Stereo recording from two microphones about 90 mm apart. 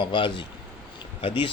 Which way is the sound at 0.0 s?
65° left (ahead or behind).